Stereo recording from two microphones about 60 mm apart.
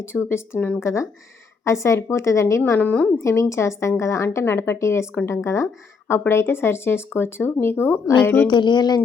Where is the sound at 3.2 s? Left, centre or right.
Left.